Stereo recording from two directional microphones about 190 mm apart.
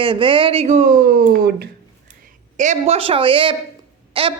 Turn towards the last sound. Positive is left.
turn(degrees=-30)  # may be behind; listen again after turning